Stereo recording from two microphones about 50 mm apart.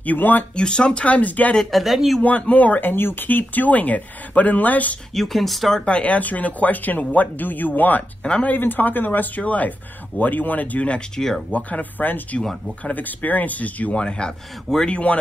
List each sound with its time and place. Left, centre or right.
0.0 s speech: left
0.6 s speech: centre; by 1.5 s left
1.6 s speech: centre
2.2 s speech: left
2.9 s speech: left
5.1 s speech: centre
5.9 s speech: left
8.2 s speech: centre
8.5 s speech: left
11.1 s speech: centre
11.5 s speech: left